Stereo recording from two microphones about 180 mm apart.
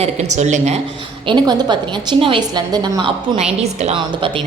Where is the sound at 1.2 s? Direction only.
25° right (ahead or behind).